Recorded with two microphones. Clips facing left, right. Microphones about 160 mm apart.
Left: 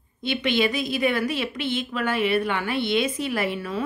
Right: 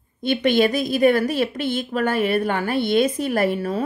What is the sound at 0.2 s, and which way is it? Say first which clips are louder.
A woman's voice: right 5 dB; 45° right (ahead or behind).